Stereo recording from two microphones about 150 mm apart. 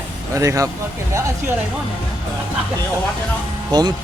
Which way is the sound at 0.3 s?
20° right (ahead or behind).